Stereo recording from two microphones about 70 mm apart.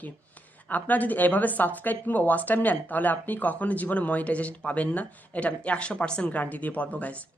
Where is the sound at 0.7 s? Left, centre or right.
Left.